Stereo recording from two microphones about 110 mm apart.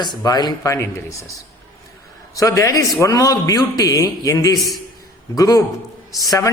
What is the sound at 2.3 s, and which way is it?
A man's voice, 30° left (ahead or behind).